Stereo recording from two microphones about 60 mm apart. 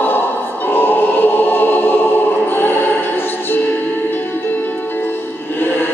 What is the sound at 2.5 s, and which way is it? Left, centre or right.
Music, left.